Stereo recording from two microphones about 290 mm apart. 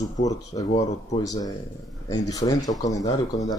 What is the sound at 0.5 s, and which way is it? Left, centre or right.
Speech, centre.